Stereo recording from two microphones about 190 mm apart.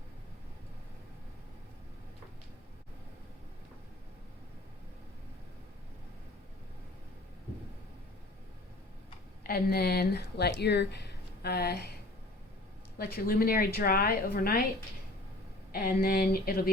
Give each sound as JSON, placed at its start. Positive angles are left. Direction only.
{"t": 9.4, "sound": "speech", "side_deg": 55}
{"t": 13.1, "sound": "a woman's voice", "side_deg": 55}
{"t": 15.7, "sound": "a woman's voice", "side_deg": 50}